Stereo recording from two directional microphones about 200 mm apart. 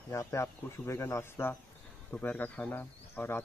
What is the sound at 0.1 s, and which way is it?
A man's voice, 15° left (ahead or behind).